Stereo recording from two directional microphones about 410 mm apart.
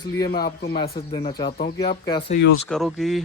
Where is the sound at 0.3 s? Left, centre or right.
Left.